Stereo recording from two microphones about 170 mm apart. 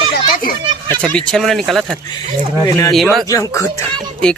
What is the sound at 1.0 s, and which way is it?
Speech, 5° left (ahead or behind).